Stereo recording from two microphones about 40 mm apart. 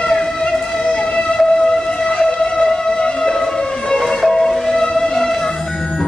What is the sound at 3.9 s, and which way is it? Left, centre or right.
Emergency vehicle, centre.